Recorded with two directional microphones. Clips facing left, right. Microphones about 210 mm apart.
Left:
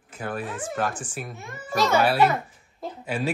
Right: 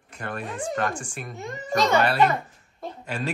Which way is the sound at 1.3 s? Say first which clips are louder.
Right 5 dB; 15° right (ahead or behind).